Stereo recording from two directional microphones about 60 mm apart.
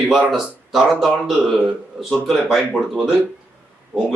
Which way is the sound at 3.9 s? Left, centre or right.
Right.